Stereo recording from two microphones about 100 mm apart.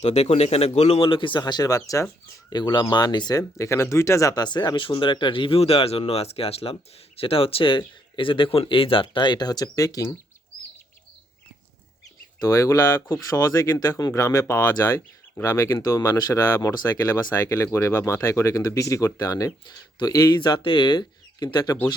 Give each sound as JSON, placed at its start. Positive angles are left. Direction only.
{"t": 0.0, "sound": "speech", "side_deg": 90}
{"t": 2.5, "sound": "speech", "side_deg": 50}
{"t": 12.4, "sound": "speech", "side_deg": 30}